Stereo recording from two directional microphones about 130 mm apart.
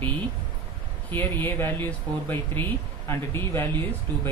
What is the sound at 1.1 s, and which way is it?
Speech, 15° left (ahead or behind).